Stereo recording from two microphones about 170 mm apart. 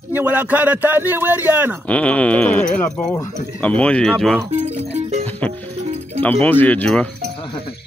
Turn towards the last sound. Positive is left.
turn(degrees=30)  # may be behind; listen again after turning